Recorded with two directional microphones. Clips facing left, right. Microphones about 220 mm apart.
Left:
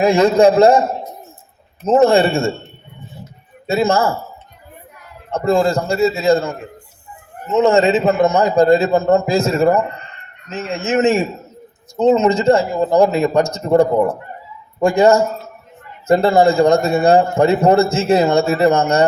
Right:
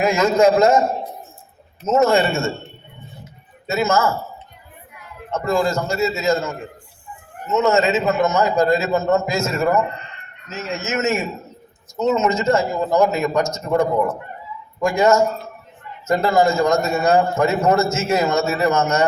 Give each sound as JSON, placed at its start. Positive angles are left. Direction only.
{"t": 0.0, "sound": "a man's voice", "side_deg": 30}
{"t": 1.9, "sound": "a man's voice", "side_deg": 30}
{"t": 3.7, "sound": "a man's voice", "side_deg": 30}
{"t": 5.3, "sound": "a man's voice", "side_deg": 30}